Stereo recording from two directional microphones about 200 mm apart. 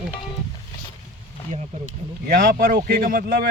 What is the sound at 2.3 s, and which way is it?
A man's voice, 50° right (ahead or behind).